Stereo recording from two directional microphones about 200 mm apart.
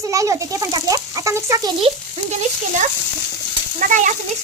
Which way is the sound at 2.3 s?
35° right (ahead or behind).